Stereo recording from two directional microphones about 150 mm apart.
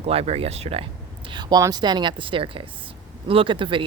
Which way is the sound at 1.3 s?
30° right (ahead or behind).